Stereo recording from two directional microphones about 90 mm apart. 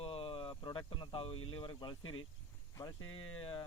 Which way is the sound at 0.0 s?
90° left.